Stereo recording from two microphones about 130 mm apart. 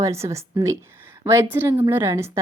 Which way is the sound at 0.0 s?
20° right (ahead or behind).